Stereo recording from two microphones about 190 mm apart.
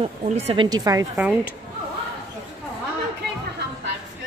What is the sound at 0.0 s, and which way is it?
Speech, 35° right (ahead or behind).